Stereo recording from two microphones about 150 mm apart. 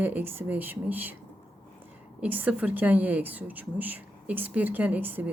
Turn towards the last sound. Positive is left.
turn(degrees=-15)  # may be behind; listen again after turning